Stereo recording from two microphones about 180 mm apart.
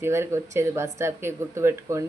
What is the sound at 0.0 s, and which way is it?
Speech, 15° right (ahead or behind).